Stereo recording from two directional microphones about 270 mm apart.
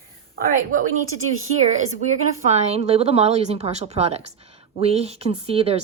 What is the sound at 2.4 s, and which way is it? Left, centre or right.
A woman's voice, right.